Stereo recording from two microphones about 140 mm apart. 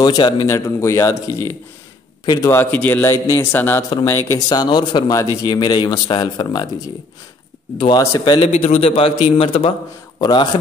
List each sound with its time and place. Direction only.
0.0 s a man's voice: 30° left (ahead or behind)
2.2 s a man's voice: 25° left (ahead or behind)
4.5 s a man's voice: 30° left (ahead or behind)
8.0 s a man's voice: 20° left (ahead or behind)
8.4 s a man's voice: 45° left (ahead or behind)
10.2 s a man's voice: 30° left (ahead or behind)